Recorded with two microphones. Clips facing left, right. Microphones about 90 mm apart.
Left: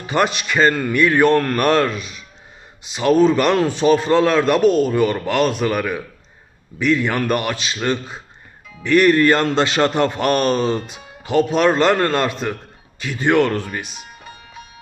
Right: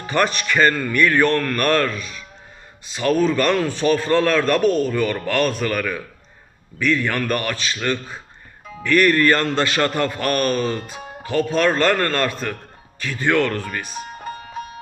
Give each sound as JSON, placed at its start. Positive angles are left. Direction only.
{"t": 0.1, "sound": "a man's voice", "side_deg": 15}
{"t": 10.9, "sound": "music", "side_deg": -40}
{"t": 11.3, "sound": "a man's voice", "side_deg": 20}
{"t": 13.8, "sound": "music", "side_deg": -40}